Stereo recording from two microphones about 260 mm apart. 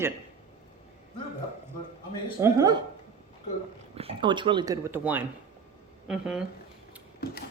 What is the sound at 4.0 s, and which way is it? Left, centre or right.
Speech, centre.